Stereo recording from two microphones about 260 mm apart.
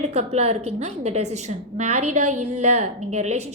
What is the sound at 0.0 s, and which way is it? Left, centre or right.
A woman's voice, right.